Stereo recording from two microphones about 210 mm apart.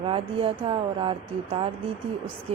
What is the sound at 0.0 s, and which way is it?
Speech, 25° right (ahead or behind).